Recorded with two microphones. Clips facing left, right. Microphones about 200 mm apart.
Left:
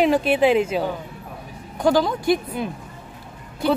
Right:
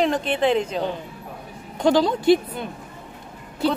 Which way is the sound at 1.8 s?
25° right (ahead or behind).